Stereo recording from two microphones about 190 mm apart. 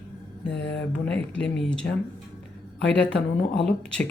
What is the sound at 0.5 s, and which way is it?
Speech, 65° left (ahead or behind).